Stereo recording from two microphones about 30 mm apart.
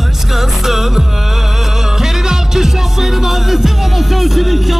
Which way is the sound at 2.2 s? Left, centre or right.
Centre.